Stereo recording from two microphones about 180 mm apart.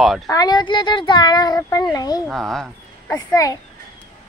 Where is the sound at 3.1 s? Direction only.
15° left (ahead or behind).